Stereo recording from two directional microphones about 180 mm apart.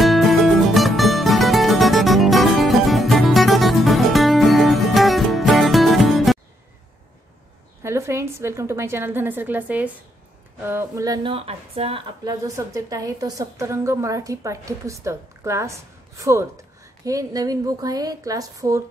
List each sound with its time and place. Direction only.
0.0 s music: centre (ahead or behind)
7.8 s a woman's voice: 15° right (ahead or behind)
11.2 s a woman's voice: 35° right (ahead or behind)
12.3 s a woman's voice: 20° right (ahead or behind)